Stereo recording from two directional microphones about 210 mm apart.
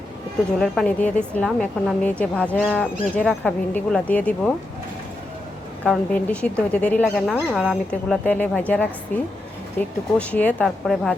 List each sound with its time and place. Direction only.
0.6 s a woman's voice: 5° left (ahead or behind)
5.8 s a woman's voice: 5° left (ahead or behind)